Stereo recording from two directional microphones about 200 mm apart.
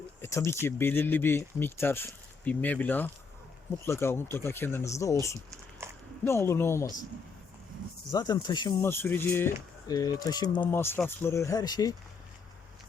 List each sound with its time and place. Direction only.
0.2 s speech: 15° left (ahead or behind)
6.2 s speech: 15° left (ahead or behind)
8.1 s speech: 20° left (ahead or behind)
10.7 s speech: 10° left (ahead or behind)